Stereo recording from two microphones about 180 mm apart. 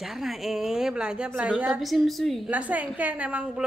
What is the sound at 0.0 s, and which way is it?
A woman's voice, centre (ahead or behind).